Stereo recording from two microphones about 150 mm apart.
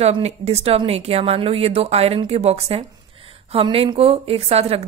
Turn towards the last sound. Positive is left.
turn(degrees=-45)  # may be behind; listen again after turning